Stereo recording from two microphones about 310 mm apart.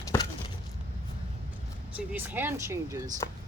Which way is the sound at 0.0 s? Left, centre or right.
Centre.